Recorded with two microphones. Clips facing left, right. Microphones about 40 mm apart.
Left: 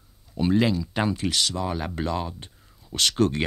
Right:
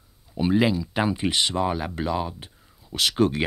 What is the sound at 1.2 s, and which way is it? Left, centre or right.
Speech, right.